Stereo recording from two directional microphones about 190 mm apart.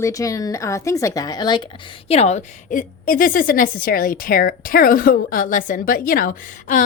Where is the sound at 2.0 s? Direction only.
35° left (ahead or behind).